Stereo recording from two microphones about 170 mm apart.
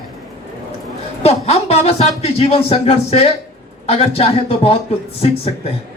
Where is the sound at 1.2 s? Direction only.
35° left (ahead or behind).